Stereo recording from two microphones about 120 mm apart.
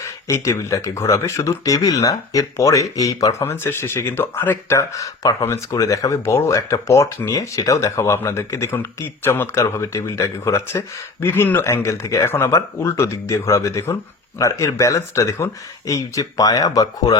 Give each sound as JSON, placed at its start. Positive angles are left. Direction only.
{"t": 0.0, "sound": "speech", "side_deg": 25}